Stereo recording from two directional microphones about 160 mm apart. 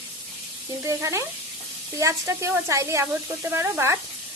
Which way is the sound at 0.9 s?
20° right (ahead or behind).